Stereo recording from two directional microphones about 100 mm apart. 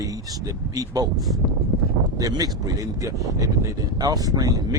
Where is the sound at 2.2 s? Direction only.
40° right (ahead or behind).